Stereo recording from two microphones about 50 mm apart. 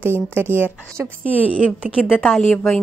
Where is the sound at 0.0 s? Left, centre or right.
Right.